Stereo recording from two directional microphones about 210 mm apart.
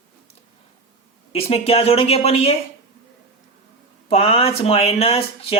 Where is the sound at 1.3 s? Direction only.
30° left (ahead or behind).